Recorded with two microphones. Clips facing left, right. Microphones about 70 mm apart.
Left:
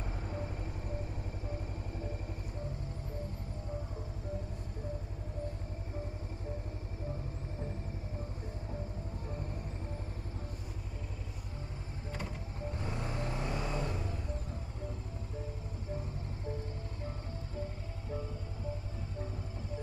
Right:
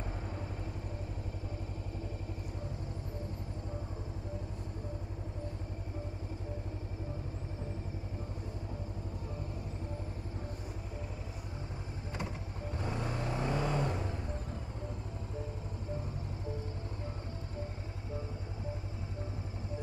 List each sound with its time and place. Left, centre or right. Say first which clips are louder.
12.7 s vehicle: right 3 dB; right